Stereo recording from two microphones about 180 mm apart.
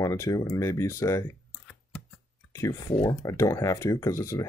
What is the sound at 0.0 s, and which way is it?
Speech, 20° left (ahead or behind).